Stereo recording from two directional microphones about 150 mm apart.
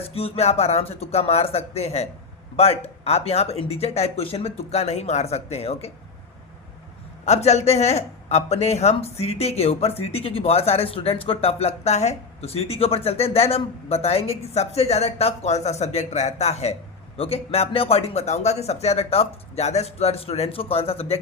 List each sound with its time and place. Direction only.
0.0 s speech: 40° left (ahead or behind)
7.3 s speech: 45° left (ahead or behind)